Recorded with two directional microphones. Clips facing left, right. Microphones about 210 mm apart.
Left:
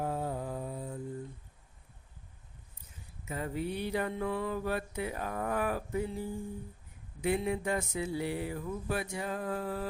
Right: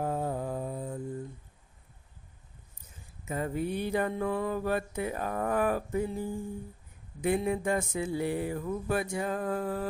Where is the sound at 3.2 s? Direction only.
45° right (ahead or behind).